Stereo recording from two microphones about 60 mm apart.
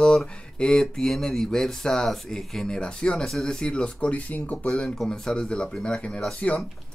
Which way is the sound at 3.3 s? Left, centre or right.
Centre.